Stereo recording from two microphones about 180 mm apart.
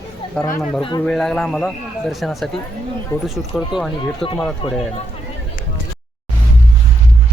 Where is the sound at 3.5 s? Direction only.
Centre (ahead or behind).